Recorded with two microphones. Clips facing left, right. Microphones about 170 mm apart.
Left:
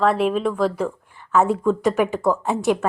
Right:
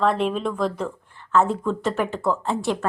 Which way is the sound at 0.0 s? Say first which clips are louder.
Left 3 dB; 5° left (ahead or behind).